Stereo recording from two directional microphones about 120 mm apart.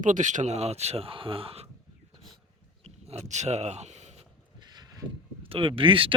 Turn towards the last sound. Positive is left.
turn(degrees=-50)  # may be behind; listen again after turning